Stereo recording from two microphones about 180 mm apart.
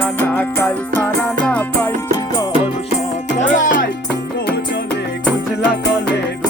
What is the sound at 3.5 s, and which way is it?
Music, 45° left (ahead or behind).